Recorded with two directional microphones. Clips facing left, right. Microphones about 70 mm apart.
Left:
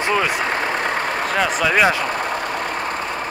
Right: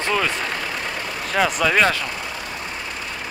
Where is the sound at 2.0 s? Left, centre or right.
Left.